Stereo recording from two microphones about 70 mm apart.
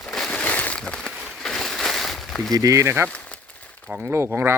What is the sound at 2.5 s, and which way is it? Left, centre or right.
Speech, right.